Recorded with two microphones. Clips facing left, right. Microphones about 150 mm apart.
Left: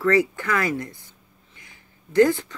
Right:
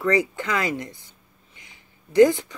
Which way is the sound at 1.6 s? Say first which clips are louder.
Left 1 dB; 20° right (ahead or behind).